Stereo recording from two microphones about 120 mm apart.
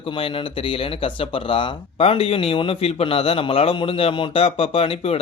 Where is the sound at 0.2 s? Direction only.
45° left (ahead or behind).